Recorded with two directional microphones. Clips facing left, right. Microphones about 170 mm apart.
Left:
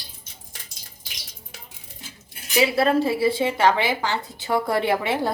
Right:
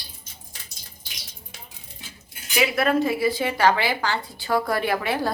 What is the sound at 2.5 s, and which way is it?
A woman's voice, 30° left (ahead or behind).